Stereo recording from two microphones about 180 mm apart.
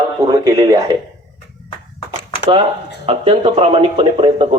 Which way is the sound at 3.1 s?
35° right (ahead or behind).